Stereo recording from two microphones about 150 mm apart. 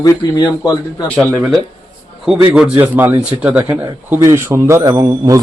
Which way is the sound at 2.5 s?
5° right (ahead or behind).